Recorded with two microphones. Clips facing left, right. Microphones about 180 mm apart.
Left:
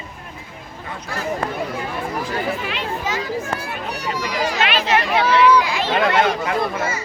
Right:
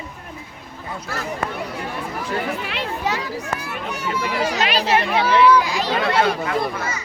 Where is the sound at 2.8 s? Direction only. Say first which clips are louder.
Even; 65° right (ahead or behind).